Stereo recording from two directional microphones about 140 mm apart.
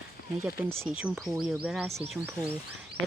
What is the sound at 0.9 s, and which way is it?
A woman's voice, 10° right (ahead or behind).